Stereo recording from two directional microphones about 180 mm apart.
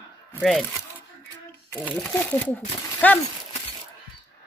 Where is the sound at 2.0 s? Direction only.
5° left (ahead or behind).